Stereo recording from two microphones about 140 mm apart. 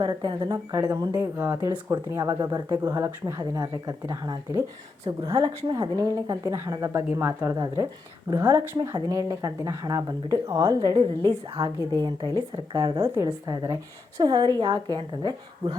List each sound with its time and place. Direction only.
0.0 s speech: 30° right (ahead or behind)
1.1 s speech: 15° right (ahead or behind)
7.5 s speech: 25° right (ahead or behind)